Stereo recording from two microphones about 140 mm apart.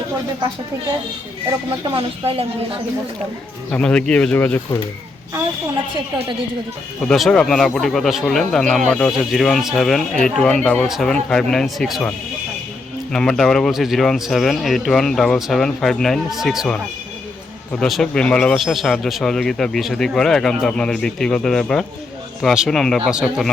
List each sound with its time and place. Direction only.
2.0 s a woman's voice: 45° right (ahead or behind)
3.7 s speech: 10° left (ahead or behind)
7.1 s speech: 5° left (ahead or behind)